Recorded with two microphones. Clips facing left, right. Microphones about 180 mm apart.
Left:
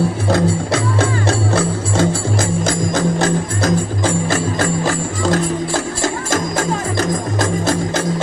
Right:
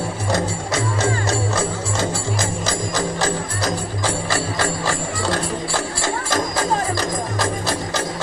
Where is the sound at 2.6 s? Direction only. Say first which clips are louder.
Left 5 dB; 50° left (ahead or behind).